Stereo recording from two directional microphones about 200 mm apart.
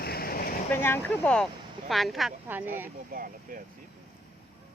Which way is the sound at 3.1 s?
45° right (ahead or behind).